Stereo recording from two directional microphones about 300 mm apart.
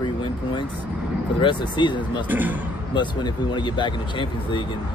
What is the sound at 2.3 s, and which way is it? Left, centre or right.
Speech, centre.